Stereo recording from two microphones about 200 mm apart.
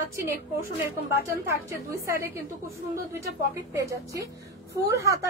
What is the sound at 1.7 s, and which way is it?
Speech, 15° right (ahead or behind).